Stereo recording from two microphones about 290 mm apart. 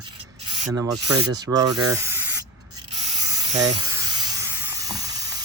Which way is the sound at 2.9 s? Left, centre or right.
Right.